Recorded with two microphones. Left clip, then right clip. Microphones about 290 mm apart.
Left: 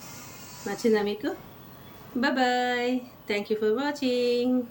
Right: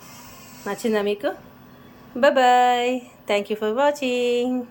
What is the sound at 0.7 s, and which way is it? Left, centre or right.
A woman's voice, centre.